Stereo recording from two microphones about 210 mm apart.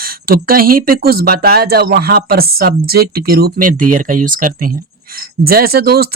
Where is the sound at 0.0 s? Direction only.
45° right (ahead or behind).